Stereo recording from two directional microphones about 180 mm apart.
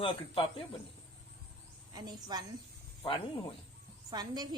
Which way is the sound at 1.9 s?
20° right (ahead or behind).